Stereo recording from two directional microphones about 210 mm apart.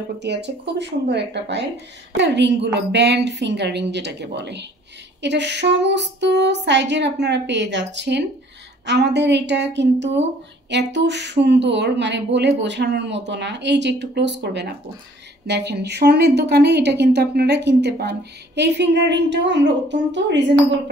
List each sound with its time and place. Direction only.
0.2 s a woman's voice: 55° right (ahead or behind)